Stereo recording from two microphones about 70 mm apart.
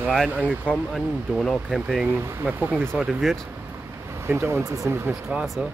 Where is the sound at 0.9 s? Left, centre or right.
Centre.